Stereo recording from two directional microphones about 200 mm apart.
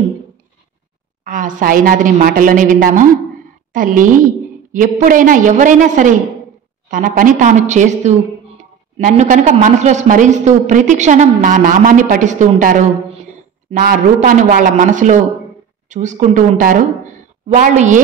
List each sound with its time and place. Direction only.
1.2 s a woman's voice: 40° right (ahead or behind)